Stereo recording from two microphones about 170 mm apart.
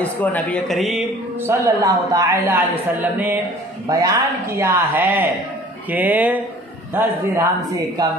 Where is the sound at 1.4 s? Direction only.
15° right (ahead or behind).